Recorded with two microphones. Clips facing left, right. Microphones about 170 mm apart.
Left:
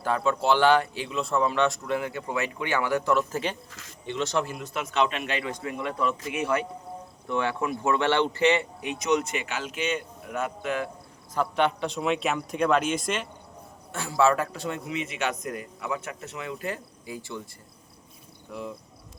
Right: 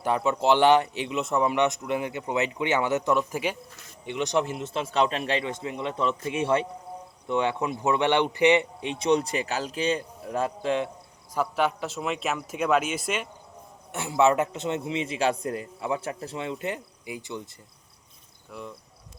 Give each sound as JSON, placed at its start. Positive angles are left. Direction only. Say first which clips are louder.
{"t": 0.0, "sound": "speech", "louder": "right 1 dB", "side_deg": -20}
{"t": 3.7, "sound": "speech", "louder": "left 2 dB", "side_deg": 90}
{"t": 4.0, "sound": "speech", "louder": "right 2 dB", "side_deg": -15}
{"t": 11.3, "sound": "a man's voice", "louder": "left 1 dB", "side_deg": -5}
{"t": 13.9, "sound": "speech", "louder": "right 1 dB", "side_deg": -20}